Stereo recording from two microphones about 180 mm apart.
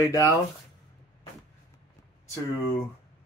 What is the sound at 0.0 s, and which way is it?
Speech, 20° left (ahead or behind).